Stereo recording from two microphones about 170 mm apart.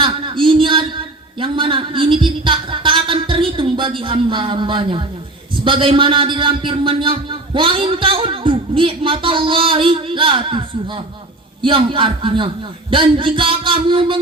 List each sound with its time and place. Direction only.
0.0 s a man's voice: 30° right (ahead or behind)